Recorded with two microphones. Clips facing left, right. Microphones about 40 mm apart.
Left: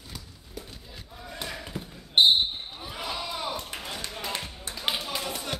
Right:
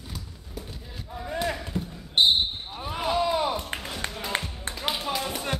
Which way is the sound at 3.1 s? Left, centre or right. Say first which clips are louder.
Right 10 dB; centre.